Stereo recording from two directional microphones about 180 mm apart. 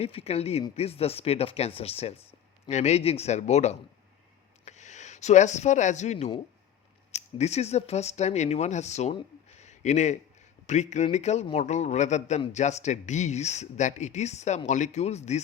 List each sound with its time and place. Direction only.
0.0 s speech: 35° left (ahead or behind)
9.5 s a sound: 40° left (ahead or behind)
10.7 s speech: 40° left (ahead or behind)